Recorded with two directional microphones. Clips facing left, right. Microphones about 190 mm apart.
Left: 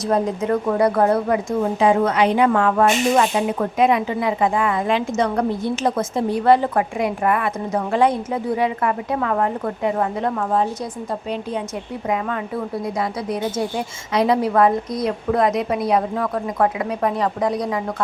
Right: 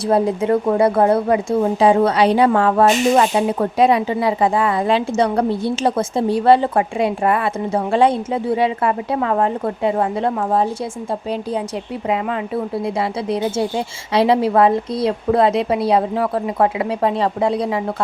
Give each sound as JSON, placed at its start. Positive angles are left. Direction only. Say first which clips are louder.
{"t": 0.1, "sound": "speech", "louder": "right 4 dB", "side_deg": -30}
{"t": 12.0, "sound": "a woman's voice", "louder": "right 2 dB", "side_deg": -25}